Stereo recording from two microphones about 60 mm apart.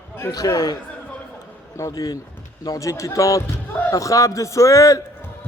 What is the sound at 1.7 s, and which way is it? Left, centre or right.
Speech, left.